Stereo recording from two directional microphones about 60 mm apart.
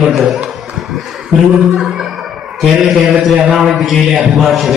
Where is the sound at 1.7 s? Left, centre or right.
Centre.